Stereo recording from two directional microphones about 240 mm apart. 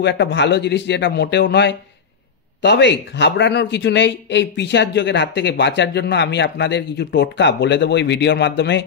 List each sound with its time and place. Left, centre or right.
0.0 s a man's voice: left